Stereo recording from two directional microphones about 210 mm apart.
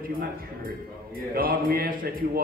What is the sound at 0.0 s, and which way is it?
A man's voice, 45° right (ahead or behind).